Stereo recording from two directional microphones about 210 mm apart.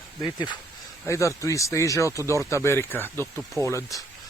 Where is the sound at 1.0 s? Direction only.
15° left (ahead or behind).